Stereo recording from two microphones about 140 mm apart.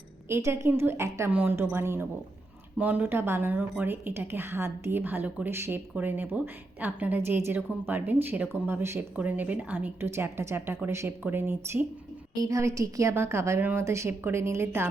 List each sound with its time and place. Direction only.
0.3 s a woman's voice: 20° right (ahead or behind)